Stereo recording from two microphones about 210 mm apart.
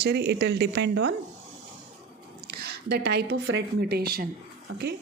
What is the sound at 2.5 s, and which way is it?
A woman's voice, 50° right (ahead or behind).